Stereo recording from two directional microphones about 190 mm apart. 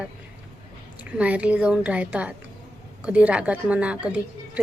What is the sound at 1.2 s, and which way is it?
A woman's voice, 5° right (ahead or behind).